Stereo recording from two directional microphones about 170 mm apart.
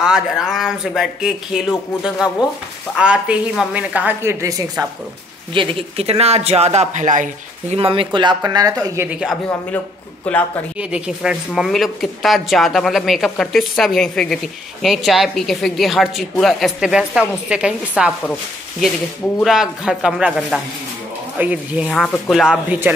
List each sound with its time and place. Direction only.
0.0 s a woman's voice: 5° right (ahead or behind); by 4.8 s 20° right (ahead or behind)
5.5 s speech: 30° right (ahead or behind); by 7.2 s 45° right (ahead or behind)
7.7 s speech: 30° right (ahead or behind); by 9.4 s 5° right (ahead or behind)
10.3 s speech: 5° left (ahead or behind)
10.8 s a woman's voice: 5° right (ahead or behind)